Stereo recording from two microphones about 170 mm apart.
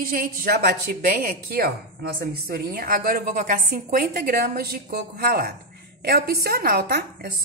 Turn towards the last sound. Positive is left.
turn(degrees=-65)  # may be behind; listen again after turning